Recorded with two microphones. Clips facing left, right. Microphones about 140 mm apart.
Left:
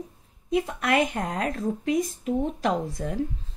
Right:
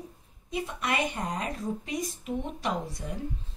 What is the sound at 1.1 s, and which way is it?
Speech, 65° left (ahead or behind).